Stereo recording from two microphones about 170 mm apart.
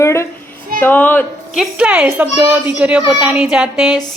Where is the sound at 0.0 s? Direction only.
15° left (ahead or behind).